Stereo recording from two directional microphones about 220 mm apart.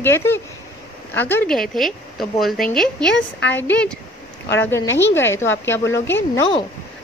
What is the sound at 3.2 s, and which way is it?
Speech, 50° left (ahead or behind).